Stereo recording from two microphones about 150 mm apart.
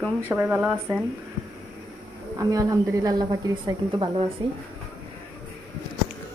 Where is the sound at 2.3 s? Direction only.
20° right (ahead or behind).